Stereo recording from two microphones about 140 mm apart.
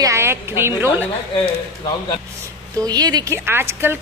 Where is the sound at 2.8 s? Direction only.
30° right (ahead or behind).